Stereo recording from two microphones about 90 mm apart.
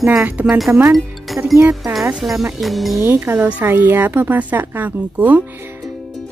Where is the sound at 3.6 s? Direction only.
25° right (ahead or behind).